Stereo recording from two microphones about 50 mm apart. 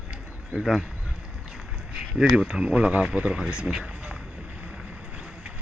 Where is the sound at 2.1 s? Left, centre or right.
Centre.